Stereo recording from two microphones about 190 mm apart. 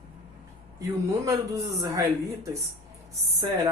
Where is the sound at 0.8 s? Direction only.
15° right (ahead or behind).